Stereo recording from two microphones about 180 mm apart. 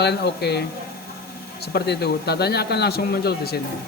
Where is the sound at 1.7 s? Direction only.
65° left (ahead or behind).